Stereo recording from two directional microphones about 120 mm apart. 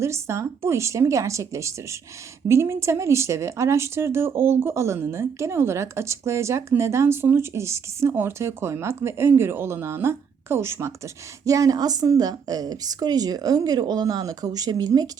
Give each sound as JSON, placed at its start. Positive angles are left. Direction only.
{"t": 0.0, "sound": "a woman's voice", "side_deg": -25}